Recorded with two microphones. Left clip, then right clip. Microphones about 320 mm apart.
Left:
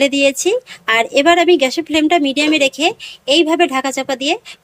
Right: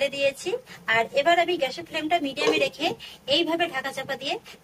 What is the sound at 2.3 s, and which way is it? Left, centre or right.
A woman's voice, left.